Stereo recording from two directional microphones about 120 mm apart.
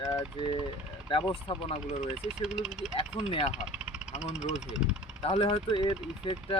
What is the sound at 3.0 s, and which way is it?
Speech, 55° left (ahead or behind).